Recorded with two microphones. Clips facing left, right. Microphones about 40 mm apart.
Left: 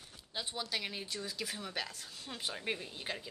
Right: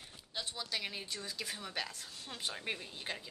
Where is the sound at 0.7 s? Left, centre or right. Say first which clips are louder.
Left 1 dB; centre.